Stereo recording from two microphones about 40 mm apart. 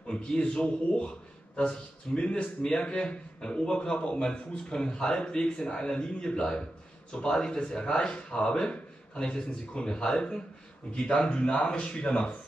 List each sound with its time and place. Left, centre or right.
0.1 s speech: left